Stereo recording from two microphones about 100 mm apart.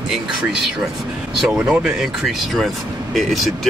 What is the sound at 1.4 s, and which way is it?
Speech, 5° right (ahead or behind).